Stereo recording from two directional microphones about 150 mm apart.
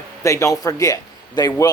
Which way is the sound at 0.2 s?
20° left (ahead or behind).